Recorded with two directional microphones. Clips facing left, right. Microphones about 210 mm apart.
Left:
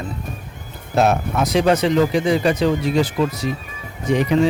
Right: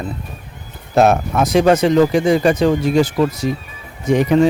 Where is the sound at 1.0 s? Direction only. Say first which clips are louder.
Right 4 dB; 50° right (ahead or behind).